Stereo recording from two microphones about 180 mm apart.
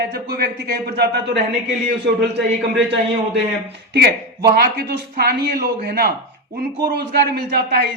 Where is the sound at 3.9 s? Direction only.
60° right (ahead or behind).